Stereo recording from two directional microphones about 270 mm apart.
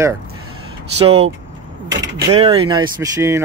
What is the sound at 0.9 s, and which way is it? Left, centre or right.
Speech, right.